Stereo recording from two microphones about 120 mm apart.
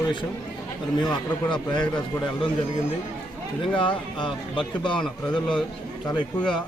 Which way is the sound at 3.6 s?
45° left (ahead or behind).